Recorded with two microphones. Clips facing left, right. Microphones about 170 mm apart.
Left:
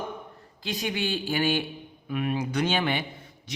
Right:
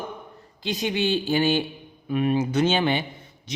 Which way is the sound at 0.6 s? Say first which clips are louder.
Right 5 dB; 20° right (ahead or behind).